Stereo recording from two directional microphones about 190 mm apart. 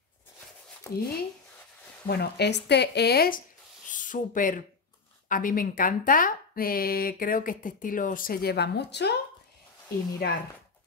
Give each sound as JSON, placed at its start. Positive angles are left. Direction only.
{"t": 2.0, "sound": "speech", "side_deg": 60}
{"t": 3.8, "sound": "speech", "side_deg": 45}